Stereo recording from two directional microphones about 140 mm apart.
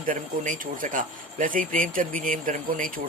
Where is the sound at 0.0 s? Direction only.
70° right (ahead or behind).